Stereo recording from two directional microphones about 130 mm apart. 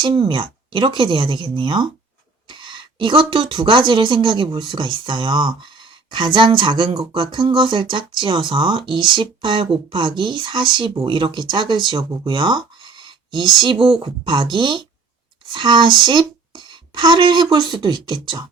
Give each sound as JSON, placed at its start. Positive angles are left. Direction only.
{"t": 0.0, "sound": "speech", "side_deg": -40}